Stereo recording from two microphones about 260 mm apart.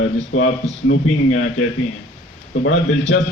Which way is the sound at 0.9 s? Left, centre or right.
Left.